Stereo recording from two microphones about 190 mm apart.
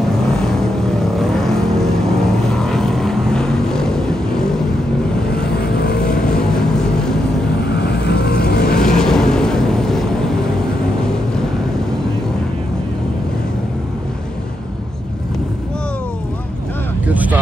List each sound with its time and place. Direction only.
0.3 s vehicle: 5° left (ahead or behind)
5.8 s vehicle: 55° left (ahead or behind)
6.3 s vehicle: 5° left (ahead or behind)
7.7 s vehicle: 60° left (ahead or behind)
8.7 s vehicle: 5° left (ahead or behind)
17.1 s vehicle: 10° right (ahead or behind)